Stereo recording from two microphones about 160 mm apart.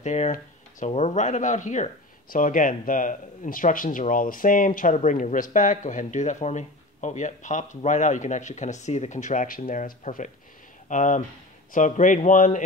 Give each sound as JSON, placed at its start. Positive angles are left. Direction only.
{"t": 0.0, "sound": "speech", "side_deg": 45}